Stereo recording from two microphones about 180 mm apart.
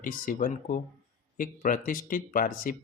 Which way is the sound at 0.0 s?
50° left (ahead or behind).